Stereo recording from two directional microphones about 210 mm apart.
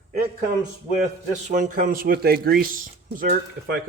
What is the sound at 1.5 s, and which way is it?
Speech, 35° right (ahead or behind).